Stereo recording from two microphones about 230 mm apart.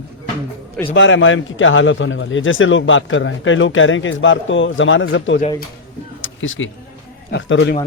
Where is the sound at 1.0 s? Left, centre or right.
Left.